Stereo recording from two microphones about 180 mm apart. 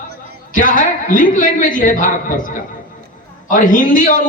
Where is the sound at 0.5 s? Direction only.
50° left (ahead or behind).